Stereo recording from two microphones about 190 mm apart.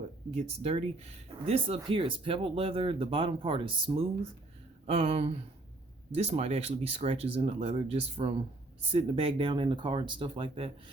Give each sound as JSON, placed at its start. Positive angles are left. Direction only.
{"t": 0.3, "sound": "speech", "side_deg": -30}